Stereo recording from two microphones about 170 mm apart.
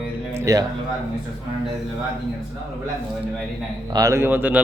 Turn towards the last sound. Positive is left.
turn(degrees=-10)  # may be behind; listen again after turning